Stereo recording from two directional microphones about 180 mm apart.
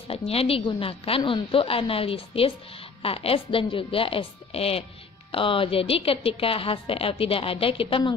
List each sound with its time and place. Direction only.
0.1 s a woman's voice: 30° left (ahead or behind)